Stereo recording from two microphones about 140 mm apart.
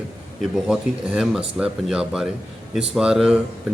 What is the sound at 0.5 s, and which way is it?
Speech, 5° right (ahead or behind).